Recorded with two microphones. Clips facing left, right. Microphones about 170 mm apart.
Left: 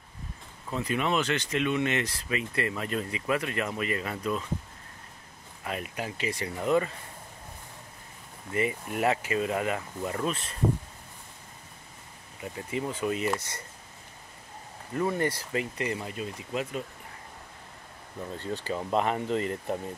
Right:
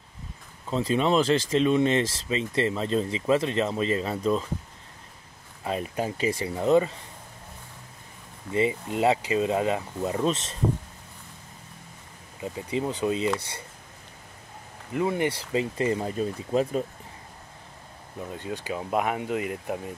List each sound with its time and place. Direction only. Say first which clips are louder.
0.7 s speech: right 5 dB; 30° right (ahead or behind)
5.6 s speech: right 6 dB; 30° right (ahead or behind)
8.5 s speech: right 4 dB; 25° right (ahead or behind)
12.4 s speech: right 4 dB; 25° right (ahead or behind)
14.9 s speech: right 2 dB; 15° right (ahead or behind)
16.0 s speech: right 7 dB; 40° right (ahead or behind)
18.3 s speech: even; 15° right (ahead or behind)